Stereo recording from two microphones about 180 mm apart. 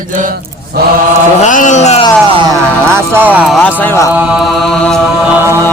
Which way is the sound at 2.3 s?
25° right (ahead or behind).